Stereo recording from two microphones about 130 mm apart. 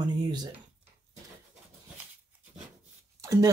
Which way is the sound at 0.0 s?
35° right (ahead or behind).